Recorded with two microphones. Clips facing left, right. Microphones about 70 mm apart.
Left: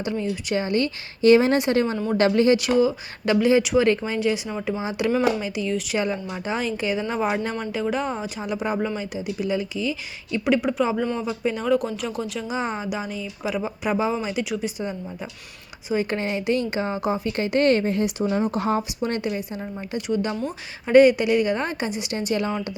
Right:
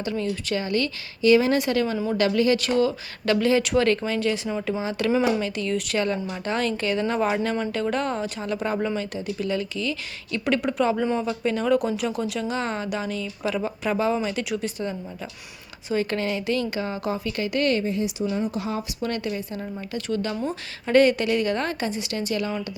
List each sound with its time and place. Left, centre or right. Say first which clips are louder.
0.0 s speech: left 1 dB; centre
2.6 s a woman's voice: left 2 dB; centre; by 18.8 s left
18.8 s a woman's voice: left 2 dB; left